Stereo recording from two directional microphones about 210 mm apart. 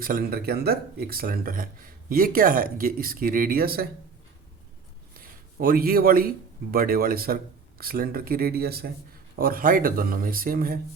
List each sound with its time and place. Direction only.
0.0 s speech: 45° right (ahead or behind)
5.1 s a man's voice: 45° right (ahead or behind)